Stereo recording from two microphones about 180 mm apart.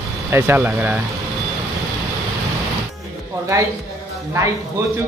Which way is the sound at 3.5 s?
20° right (ahead or behind).